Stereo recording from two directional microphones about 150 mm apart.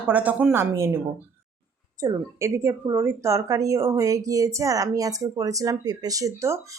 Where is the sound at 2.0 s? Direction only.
20° right (ahead or behind).